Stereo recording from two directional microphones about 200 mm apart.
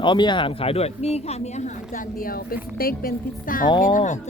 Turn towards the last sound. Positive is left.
turn(degrees=40)  # may be behind; listen again after turning